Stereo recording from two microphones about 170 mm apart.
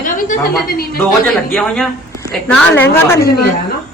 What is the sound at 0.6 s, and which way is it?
Speech, 65° left (ahead or behind).